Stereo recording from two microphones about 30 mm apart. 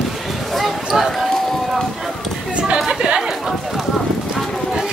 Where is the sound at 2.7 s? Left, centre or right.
Right.